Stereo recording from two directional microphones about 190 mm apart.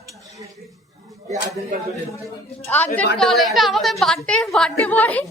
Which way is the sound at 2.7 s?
10° left (ahead or behind).